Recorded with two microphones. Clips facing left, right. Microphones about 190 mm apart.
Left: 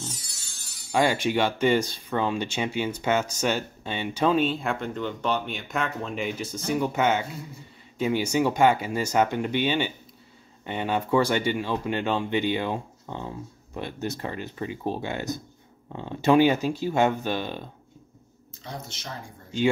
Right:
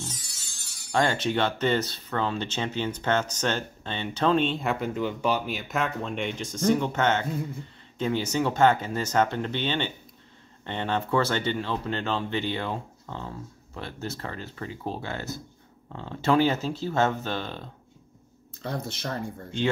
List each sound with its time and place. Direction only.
0.9 s speech: 10° left (ahead or behind)
18.6 s speech: 60° right (ahead or behind)